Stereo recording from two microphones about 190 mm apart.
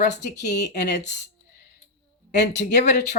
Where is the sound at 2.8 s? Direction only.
60° left (ahead or behind).